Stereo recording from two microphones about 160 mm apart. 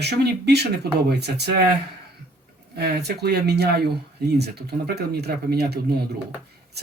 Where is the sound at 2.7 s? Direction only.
90° right.